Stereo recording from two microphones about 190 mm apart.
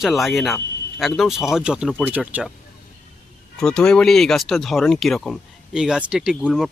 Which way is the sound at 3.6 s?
5° left (ahead or behind).